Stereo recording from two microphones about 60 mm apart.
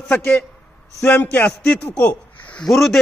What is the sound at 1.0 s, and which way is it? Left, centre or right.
A man's voice, left.